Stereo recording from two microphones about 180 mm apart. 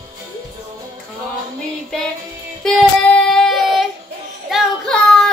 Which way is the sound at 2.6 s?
5° left (ahead or behind).